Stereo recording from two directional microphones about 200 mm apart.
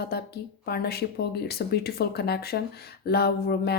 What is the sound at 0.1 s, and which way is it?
Speech, 50° left (ahead or behind).